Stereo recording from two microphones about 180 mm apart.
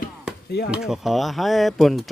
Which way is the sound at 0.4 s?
65° left (ahead or behind).